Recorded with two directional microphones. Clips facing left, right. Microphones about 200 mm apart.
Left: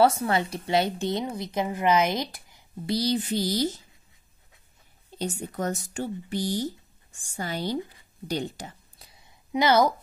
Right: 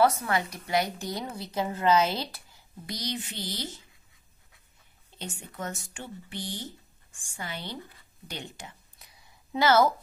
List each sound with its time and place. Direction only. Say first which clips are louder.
0.0 s a woman's voice: left 3 dB; 30° left (ahead or behind)
2.9 s speech: left 10 dB; 35° left (ahead or behind)
5.1 s speech: left 9 dB; 40° left (ahead or behind)
8.3 s a sound: left 10 dB; 35° left (ahead or behind)
9.5 s a woman's voice: left 1 dB; 15° left (ahead or behind)